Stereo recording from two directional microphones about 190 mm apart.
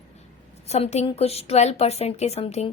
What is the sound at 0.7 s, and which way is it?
A woman's voice, 35° left (ahead or behind).